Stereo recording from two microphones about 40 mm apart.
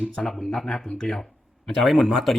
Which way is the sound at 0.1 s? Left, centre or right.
Centre.